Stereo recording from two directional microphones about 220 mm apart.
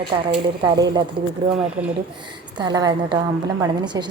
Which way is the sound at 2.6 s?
20° right (ahead or behind).